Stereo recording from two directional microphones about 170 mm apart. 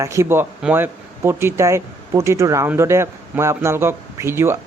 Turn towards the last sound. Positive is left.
turn(degrees=-15)  # may be behind; listen again after turning